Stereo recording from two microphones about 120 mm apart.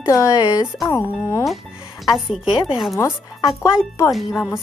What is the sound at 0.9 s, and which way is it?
Speech, 20° left (ahead or behind).